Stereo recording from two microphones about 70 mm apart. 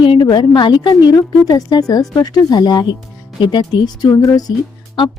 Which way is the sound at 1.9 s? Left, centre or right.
Left.